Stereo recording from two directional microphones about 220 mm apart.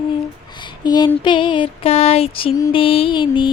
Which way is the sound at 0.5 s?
20° left (ahead or behind).